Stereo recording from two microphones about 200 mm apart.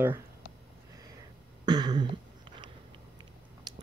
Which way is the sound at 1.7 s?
20° right (ahead or behind).